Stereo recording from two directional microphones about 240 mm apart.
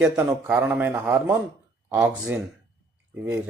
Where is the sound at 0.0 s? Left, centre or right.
Centre.